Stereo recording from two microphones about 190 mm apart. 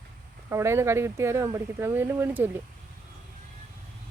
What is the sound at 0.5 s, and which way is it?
Speech, 15° right (ahead or behind).